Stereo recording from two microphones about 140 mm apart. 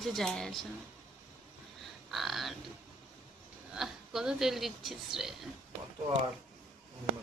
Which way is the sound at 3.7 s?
5° right (ahead or behind).